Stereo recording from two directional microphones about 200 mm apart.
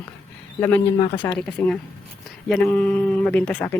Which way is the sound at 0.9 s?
25° left (ahead or behind).